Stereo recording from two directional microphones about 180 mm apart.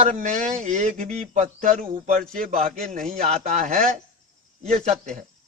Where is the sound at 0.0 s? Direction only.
45° right (ahead or behind).